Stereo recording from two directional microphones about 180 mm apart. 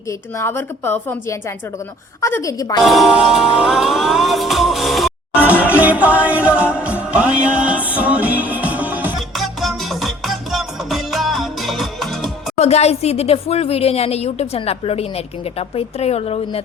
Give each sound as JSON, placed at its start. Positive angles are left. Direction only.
{"t": 0.3, "sound": "a woman's voice", "side_deg": 10}
{"t": 2.8, "sound": "music", "side_deg": 0}
{"t": 12.5, "sound": "speech", "side_deg": 35}